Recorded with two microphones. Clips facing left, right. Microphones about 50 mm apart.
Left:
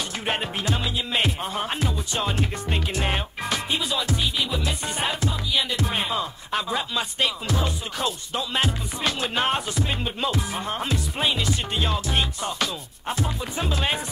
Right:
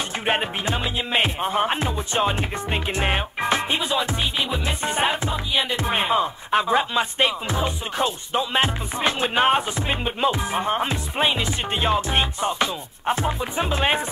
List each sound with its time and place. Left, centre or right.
0.2 s music: right